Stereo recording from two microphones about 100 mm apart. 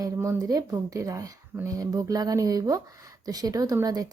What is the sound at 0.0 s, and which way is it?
Speech, 35° right (ahead or behind).